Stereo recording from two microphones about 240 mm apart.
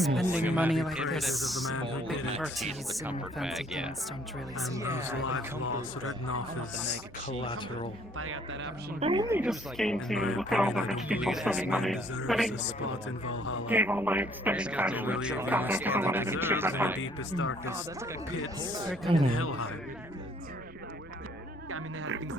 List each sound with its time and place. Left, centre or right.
0.2 s speech: centre
3.0 s speech: centre
4.7 s a man's voice: centre
5.2 s speech: left
7.3 s speech: left
8.2 s speech: right
9.0 s speech: right
9.2 s speech: centre
13.4 s speech: left
13.7 s a man's voice: centre
17.0 s speech: left
19.3 s speech: left
21.7 s speech: right